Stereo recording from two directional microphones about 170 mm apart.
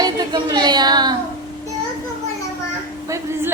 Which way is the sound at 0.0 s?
25° right (ahead or behind).